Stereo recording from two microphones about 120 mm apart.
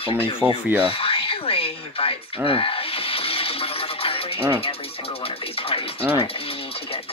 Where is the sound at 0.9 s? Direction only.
50° left (ahead or behind).